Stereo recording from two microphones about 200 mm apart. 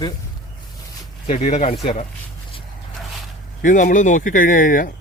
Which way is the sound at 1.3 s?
35° left (ahead or behind).